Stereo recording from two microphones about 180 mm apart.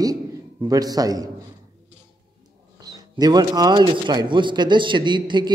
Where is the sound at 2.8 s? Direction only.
20° right (ahead or behind).